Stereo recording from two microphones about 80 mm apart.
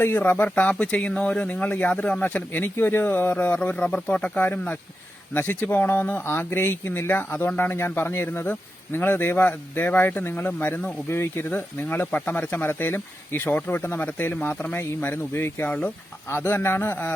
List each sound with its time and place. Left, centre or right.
0.0 s speech: left